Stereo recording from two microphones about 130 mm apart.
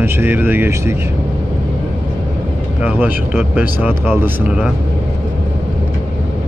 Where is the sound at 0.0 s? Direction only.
15° right (ahead or behind).